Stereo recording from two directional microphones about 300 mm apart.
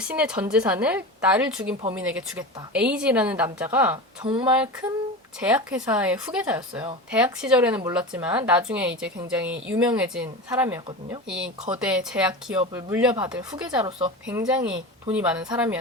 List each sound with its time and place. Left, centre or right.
0.0 s a woman's voice: centre
4.3 s speech: centre
4.5 s a woman's voice: centre